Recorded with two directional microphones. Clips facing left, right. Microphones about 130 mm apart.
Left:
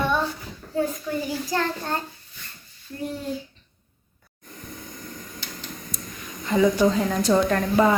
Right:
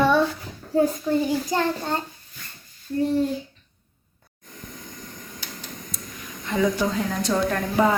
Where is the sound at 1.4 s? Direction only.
20° right (ahead or behind).